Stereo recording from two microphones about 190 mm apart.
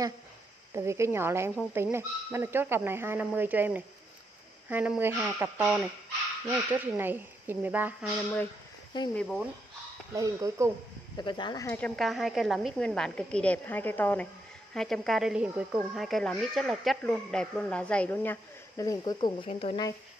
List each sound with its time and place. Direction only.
0.7 s speech: 15° right (ahead or behind)
9.1 s speech: centre (ahead or behind)
10.1 s speech: 15° right (ahead or behind)
11.1 s speech: 25° left (ahead or behind)
11.8 s speech: centre (ahead or behind); by 19.1 s 15° left (ahead or behind)
19.1 s speech: 30° left (ahead or behind)